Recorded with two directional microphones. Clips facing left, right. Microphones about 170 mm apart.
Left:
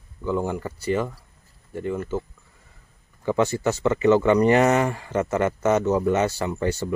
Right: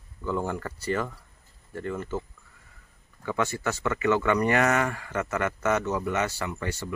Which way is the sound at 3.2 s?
30° left (ahead or behind).